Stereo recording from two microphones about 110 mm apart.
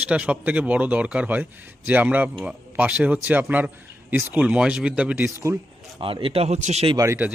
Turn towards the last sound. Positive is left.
turn(degrees=-30)  # may be behind; listen again after turning